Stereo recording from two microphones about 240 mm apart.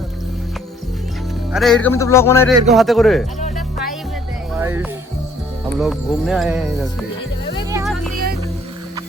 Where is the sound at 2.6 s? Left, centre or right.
Centre.